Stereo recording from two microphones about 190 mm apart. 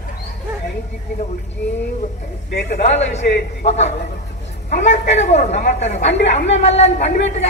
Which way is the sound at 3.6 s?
35° left (ahead or behind).